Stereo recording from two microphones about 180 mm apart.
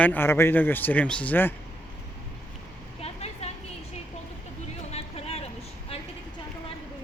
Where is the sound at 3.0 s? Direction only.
35° left (ahead or behind).